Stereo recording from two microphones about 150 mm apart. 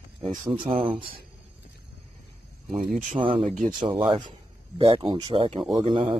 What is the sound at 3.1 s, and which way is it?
Speech, 35° right (ahead or behind).